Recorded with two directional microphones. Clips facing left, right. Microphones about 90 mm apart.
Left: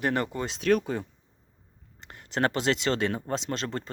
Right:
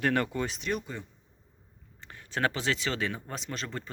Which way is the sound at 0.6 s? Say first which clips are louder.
Left 12 dB; 90° left.